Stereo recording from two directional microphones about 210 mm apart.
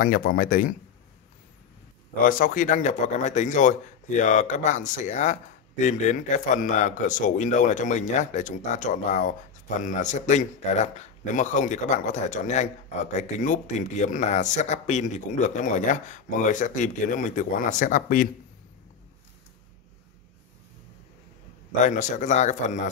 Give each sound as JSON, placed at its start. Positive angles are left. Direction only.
{"t": 0.0, "sound": "a man's voice", "side_deg": 40}
{"t": 2.2, "sound": "a man's voice", "side_deg": 40}
{"t": 21.8, "sound": "a man's voice", "side_deg": 35}